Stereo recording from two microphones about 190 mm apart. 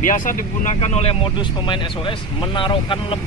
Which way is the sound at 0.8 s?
35° left (ahead or behind).